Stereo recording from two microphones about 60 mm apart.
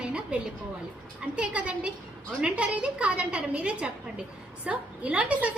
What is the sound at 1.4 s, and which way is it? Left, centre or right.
A woman's voice, centre.